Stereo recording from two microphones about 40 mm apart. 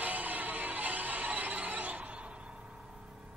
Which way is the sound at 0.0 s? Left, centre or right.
Right.